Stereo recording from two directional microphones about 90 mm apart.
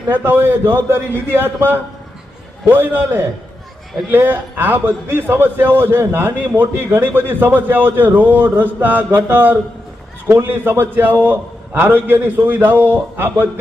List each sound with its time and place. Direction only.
0.1 s a man's voice: 25° right (ahead or behind)